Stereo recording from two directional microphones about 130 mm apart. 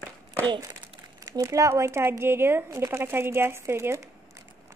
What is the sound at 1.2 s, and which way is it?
Speech, 25° right (ahead or behind).